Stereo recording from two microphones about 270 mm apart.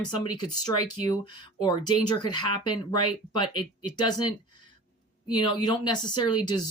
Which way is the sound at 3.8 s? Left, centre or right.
Centre.